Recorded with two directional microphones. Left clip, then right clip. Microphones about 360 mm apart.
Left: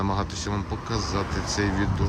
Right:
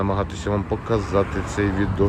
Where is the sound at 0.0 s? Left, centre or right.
Centre.